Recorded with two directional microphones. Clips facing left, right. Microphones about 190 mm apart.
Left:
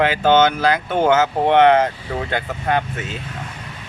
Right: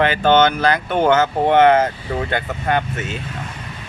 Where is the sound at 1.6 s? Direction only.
45° right (ahead or behind).